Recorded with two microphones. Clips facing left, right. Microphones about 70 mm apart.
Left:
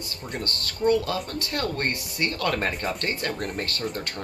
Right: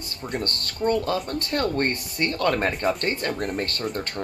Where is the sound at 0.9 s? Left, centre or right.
Right.